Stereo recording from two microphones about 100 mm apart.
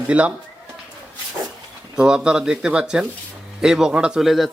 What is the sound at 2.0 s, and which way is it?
A man's voice, 10° right (ahead or behind).